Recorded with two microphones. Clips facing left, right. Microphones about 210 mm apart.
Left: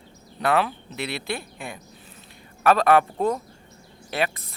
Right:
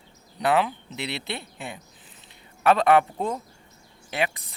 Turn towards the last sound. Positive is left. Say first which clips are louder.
# left 1 dB
turn(degrees=-15)  # may be behind; listen again after turning